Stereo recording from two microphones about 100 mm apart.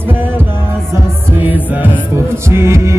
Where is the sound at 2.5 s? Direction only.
30° right (ahead or behind).